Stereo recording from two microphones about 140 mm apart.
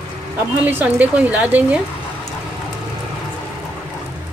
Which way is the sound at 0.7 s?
10° right (ahead or behind).